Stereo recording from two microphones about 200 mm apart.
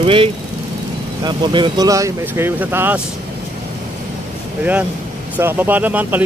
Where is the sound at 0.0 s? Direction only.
25° right (ahead or behind).